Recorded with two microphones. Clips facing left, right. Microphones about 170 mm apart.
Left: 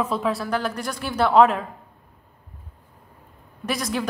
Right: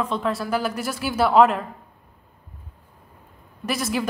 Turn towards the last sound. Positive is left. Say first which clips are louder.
# right 1 dB
turn(degrees=0)  # may be behind; listen again after turning